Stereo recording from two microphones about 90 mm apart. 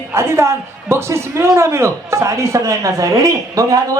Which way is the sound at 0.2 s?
30° right (ahead or behind).